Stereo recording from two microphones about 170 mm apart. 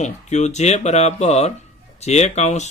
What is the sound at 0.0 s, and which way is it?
A man's voice, 40° left (ahead or behind).